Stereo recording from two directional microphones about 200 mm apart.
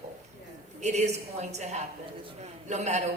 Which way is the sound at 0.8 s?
35° right (ahead or behind).